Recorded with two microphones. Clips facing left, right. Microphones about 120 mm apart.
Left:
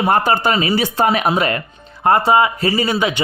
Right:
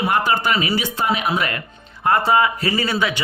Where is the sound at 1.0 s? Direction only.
50° left (ahead or behind).